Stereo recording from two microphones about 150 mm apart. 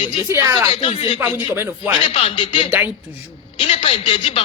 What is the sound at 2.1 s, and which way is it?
Speech, 40° left (ahead or behind).